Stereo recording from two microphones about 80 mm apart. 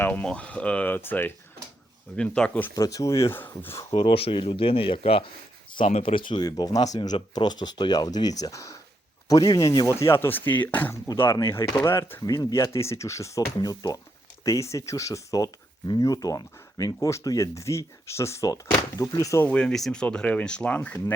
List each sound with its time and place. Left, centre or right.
0.0 s speech: centre
2.1 s speech: centre
2.7 s speech: left
3.9 s speech: left
9.9 s speech: left
12.2 s speech: left
12.7 s speech: left
13.6 s speech: left
14.4 s speech: left
19.5 s speech: centre